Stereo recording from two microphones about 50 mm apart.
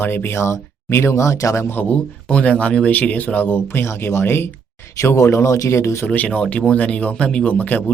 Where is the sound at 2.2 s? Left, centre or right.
Left.